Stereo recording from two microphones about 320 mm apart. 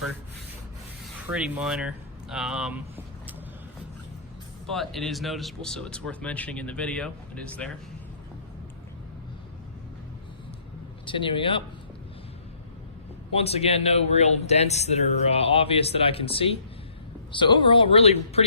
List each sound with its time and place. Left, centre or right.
1.3 s speech: centre
4.7 s speech: centre
11.0 s speech: centre
13.3 s speech: centre